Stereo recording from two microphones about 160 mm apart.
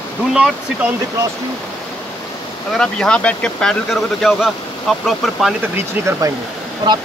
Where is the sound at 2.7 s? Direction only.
5° left (ahead or behind).